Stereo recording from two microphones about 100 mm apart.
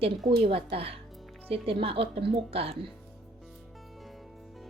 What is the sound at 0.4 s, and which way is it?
Speech, 70° right (ahead or behind).